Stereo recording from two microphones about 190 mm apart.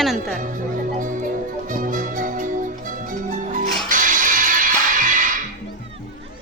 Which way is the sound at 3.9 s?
45° right (ahead or behind).